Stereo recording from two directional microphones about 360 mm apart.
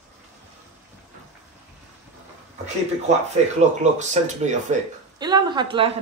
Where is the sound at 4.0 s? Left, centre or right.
Centre.